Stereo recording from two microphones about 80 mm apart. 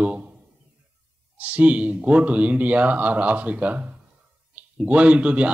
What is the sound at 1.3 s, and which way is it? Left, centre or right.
Speech, centre.